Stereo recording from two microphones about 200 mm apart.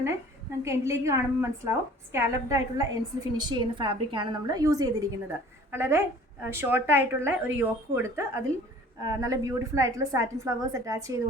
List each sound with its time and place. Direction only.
0.6 s a woman's voice: 15° right (ahead or behind)